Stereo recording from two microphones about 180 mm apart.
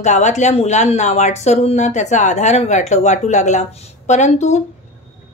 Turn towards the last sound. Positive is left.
turn(degrees=40)  # may be behind; listen again after turning